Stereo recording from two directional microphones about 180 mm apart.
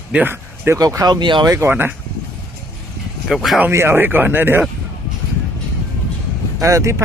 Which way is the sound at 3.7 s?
15° right (ahead or behind).